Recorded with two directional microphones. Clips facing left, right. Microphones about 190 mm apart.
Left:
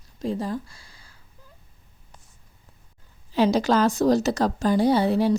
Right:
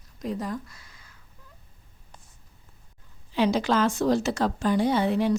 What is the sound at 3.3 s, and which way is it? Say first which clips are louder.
A woman's voice: left 3 dB; 40° left (ahead or behind).